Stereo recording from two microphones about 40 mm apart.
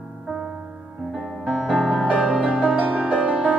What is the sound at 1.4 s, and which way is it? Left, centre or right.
Music, left.